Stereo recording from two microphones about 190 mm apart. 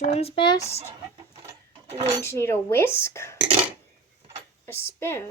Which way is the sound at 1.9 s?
35° right (ahead or behind).